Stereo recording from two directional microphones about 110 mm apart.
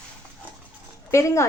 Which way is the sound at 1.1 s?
25° left (ahead or behind).